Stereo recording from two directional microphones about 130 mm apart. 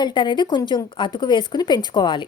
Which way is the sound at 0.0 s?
40° left (ahead or behind).